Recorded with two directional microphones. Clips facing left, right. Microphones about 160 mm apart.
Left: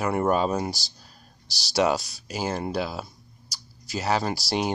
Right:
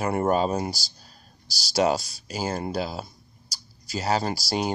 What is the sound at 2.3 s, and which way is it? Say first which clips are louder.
Speech: even; 40° right (ahead or behind).